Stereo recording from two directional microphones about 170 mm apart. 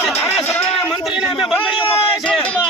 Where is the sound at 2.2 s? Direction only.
5° left (ahead or behind).